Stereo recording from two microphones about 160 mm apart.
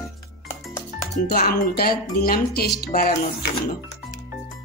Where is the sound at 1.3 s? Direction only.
70° left (ahead or behind).